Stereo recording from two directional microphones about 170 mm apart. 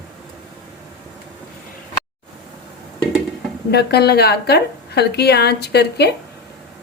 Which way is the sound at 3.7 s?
70° left (ahead or behind).